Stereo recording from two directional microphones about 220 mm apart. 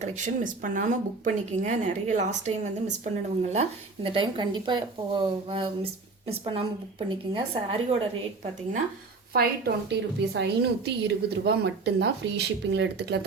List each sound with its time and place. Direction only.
0.0 s a woman's voice: 35° right (ahead or behind)
9.3 s a woman's voice: 45° right (ahead or behind)